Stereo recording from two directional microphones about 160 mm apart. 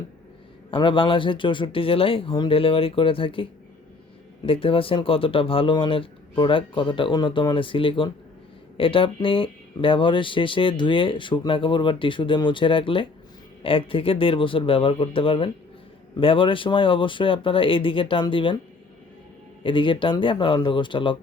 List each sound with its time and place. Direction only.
0.7 s speech: 30° left (ahead or behind)
4.4 s speech: 35° left (ahead or behind)
19.6 s speech: 30° left (ahead or behind)